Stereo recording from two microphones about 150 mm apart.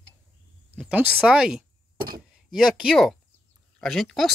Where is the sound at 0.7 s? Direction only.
10° right (ahead or behind).